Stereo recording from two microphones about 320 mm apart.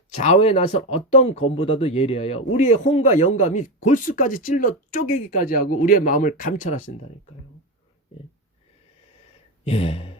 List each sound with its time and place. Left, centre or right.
0.1 s speech: left
9.6 s speech: centre